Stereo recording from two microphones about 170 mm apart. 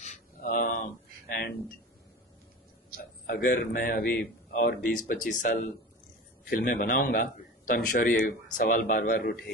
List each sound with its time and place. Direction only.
0.0 s a sound: 50° left (ahead or behind)
1.3 s speech: 65° left (ahead or behind)
3.3 s a man's voice: 55° left (ahead or behind)